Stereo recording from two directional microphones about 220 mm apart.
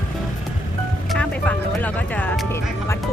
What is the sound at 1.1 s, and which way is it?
Music, 5° left (ahead or behind).